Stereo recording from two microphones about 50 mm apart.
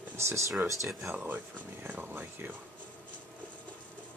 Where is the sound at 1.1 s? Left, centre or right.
Right.